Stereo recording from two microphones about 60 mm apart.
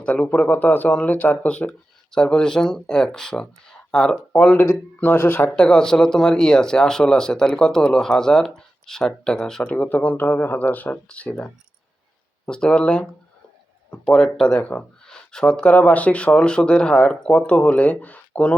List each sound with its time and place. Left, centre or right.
0.0 s a man's voice: centre
0.4 s speech: left
2.1 s speech: centre
4.3 s speech: left
5.5 s speech: centre
9.7 s speech: left
12.5 s speech: centre
14.6 s speech: left
15.0 s a sound: centre
15.7 s speech: left